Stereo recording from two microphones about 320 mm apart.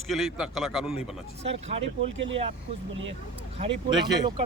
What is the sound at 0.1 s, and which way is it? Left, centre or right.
Speech, centre.